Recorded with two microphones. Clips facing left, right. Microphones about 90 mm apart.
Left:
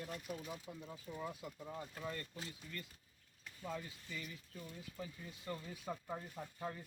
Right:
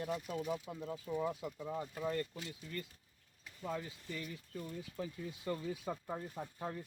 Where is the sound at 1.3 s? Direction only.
85° right.